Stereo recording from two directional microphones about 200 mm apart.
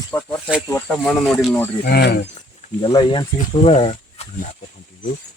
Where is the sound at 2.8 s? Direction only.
25° left (ahead or behind).